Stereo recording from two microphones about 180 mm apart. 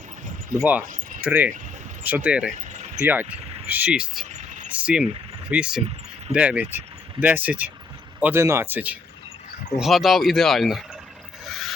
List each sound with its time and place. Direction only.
0.6 s speech: 10° right (ahead or behind)
2.6 s a sound: 40° right (ahead or behind)
3.0 s speech: 10° right (ahead or behind)
4.3 s vehicle: 40° right (ahead or behind)
4.7 s speech: 5° right (ahead or behind)
11.4 s mechanisms: centre (ahead or behind)